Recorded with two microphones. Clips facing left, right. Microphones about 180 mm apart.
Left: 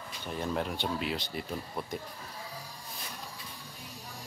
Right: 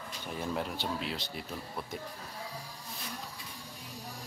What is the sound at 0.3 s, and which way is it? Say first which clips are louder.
Speech: left 2 dB; 5° right (ahead or behind).